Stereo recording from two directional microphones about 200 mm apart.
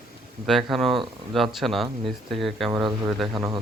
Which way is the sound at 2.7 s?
20° right (ahead or behind).